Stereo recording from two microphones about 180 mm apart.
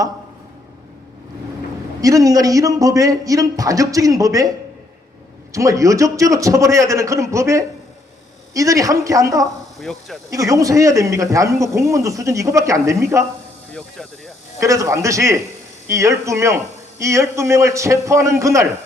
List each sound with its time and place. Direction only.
2.0 s a man's voice: 20° right (ahead or behind)
9.7 s speech: centre (ahead or behind)
10.2 s a man's voice: 20° right (ahead or behind)
14.6 s a man's voice: 15° right (ahead or behind)